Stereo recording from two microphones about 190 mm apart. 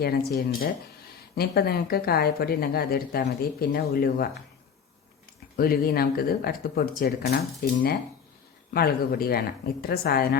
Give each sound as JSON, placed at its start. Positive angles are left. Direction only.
{"t": 0.0, "sound": "speech", "side_deg": 55}
{"t": 5.5, "sound": "speech", "side_deg": 50}